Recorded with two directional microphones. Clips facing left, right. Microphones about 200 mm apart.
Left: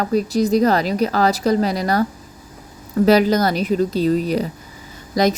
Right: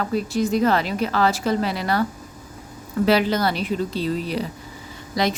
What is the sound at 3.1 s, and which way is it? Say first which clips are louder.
Speech: left 5 dB; 40° left (ahead or behind).